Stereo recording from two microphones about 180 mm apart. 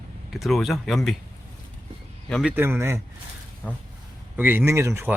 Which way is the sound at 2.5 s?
15° right (ahead or behind).